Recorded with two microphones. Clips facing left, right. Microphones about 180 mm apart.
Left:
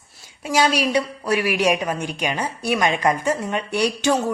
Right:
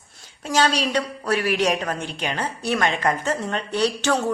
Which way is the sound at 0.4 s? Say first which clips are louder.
Left 2 dB; 10° left (ahead or behind).